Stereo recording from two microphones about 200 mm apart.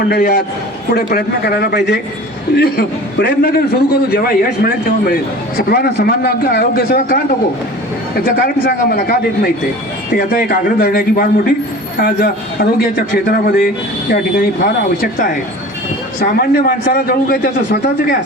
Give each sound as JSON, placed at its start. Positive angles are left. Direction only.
{"t": 0.0, "sound": "a man's voice", "side_deg": 50}